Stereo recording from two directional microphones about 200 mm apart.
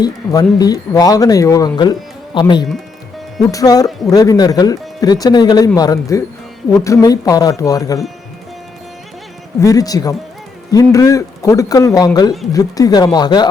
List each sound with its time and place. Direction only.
0.0 s speech: 20° left (ahead or behind)
9.6 s speech: 15° left (ahead or behind)